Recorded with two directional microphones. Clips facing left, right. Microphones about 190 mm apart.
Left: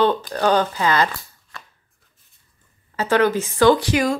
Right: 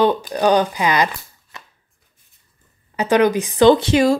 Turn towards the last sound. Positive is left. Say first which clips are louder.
# right 4 dB
turn(degrees=-25)  # may be behind; listen again after turning